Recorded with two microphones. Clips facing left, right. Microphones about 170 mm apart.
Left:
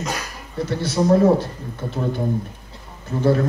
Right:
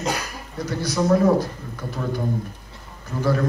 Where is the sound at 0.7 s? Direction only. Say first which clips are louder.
Left 2 dB; 25° left (ahead or behind).